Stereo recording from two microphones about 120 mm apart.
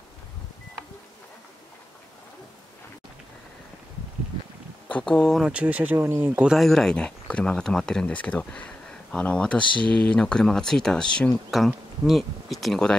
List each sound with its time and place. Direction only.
4.8 s speech: 10° left (ahead or behind)
5.4 s speech: 10° right (ahead or behind)
6.4 s speech: centre (ahead or behind)
9.8 s speech: 45° right (ahead or behind)
10.0 s speech: 10° left (ahead or behind)